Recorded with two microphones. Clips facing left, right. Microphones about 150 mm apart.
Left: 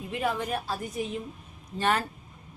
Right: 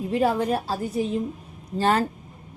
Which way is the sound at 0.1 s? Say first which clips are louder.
Right 7 dB; 35° right (ahead or behind).